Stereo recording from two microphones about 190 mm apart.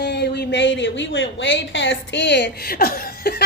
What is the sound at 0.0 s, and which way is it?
A woman's voice, 60° left (ahead or behind).